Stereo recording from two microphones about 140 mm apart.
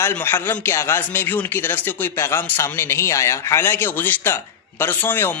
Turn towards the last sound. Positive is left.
turn(degrees=15)  # may be behind; listen again after turning